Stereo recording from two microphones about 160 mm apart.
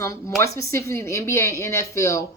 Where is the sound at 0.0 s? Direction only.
20° left (ahead or behind).